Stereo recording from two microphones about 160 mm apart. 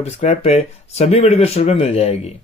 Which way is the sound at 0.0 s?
40° left (ahead or behind).